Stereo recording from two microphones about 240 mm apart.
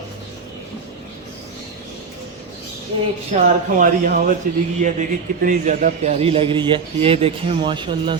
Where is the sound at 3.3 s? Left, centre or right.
Right.